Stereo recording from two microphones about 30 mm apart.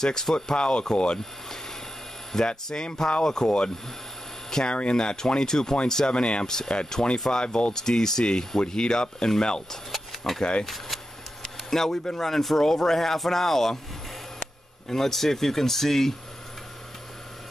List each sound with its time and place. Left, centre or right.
0.0 s speech: centre
0.6 s speech: left
2.3 s speech: left
6.1 s speech: left
6.4 s speech: centre
7.4 s speech: left
7.7 s speech: centre
9.9 s a sound: centre
10.6 s speech: centre
11.7 s speech: centre
14.9 s speech: centre